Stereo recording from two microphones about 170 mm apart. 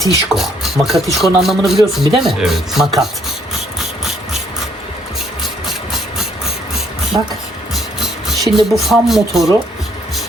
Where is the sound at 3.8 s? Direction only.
Centre (ahead or behind).